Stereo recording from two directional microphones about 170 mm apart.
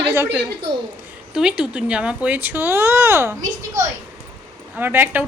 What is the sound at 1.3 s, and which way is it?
Speech, 5° right (ahead or behind).